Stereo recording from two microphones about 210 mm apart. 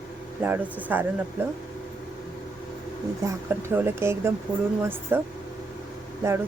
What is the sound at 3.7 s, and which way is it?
Speech, 10° right (ahead or behind).